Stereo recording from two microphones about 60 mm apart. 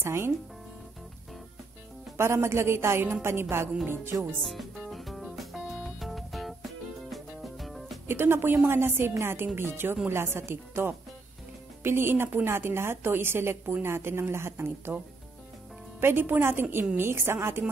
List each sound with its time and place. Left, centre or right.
0.0 s a woman's voice: right
2.1 s a woman's voice: right
4.4 s music: centre
8.1 s a woman's voice: right
16.0 s a woman's voice: right